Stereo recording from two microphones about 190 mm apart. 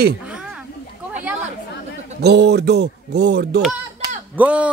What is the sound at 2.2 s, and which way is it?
Speech, 60° right (ahead or behind).